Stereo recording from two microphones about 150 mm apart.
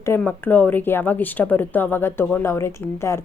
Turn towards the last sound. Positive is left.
turn(degrees=20)  # may be behind; listen again after turning